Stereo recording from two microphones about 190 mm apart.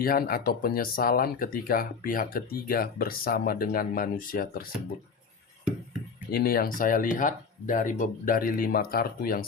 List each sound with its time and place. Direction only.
0.0 s speech: 50° left (ahead or behind)
6.3 s speech: 50° left (ahead or behind)